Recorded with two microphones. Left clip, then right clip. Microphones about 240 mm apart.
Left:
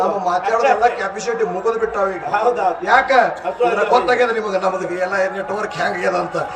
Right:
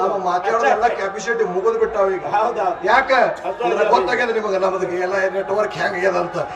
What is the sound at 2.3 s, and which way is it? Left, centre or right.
A man's voice, left.